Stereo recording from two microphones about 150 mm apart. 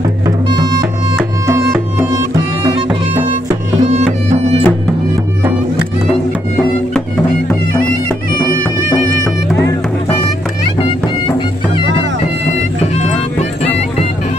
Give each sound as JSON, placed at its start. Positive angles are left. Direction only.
{"t": 0.5, "sound": "music", "side_deg": -30}
{"t": 3.8, "sound": "music", "side_deg": -45}
{"t": 10.8, "sound": "music", "side_deg": 35}